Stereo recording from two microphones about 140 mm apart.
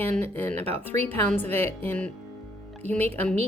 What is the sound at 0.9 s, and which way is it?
Speech, 50° right (ahead or behind).